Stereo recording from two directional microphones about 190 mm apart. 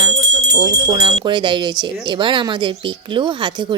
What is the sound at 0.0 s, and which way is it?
Speech, 25° right (ahead or behind).